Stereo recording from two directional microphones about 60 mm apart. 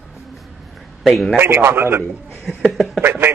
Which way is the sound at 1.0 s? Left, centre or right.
Centre.